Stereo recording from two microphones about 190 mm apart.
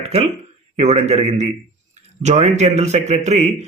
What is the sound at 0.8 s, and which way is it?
Speech, 35° right (ahead or behind).